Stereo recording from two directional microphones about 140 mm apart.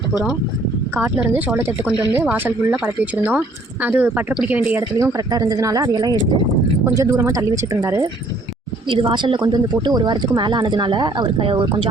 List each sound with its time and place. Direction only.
0.9 s speech: 10° right (ahead or behind)
4.9 s speech: 25° right (ahead or behind)
8.9 s speech: 35° right (ahead or behind)